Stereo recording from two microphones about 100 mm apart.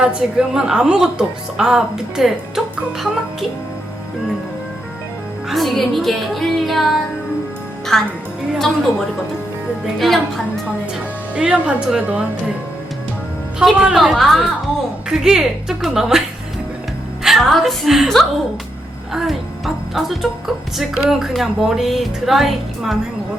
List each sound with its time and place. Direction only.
0.0 s a woman's voice: 10° right (ahead or behind)
5.5 s speech: centre (ahead or behind)
11.3 s a woman's voice: 10° right (ahead or behind)
13.6 s speech: 5° right (ahead or behind)
17.2 s speech: centre (ahead or behind)